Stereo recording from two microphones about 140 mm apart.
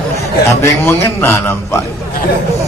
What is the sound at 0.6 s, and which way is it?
A man's voice, 15° left (ahead or behind).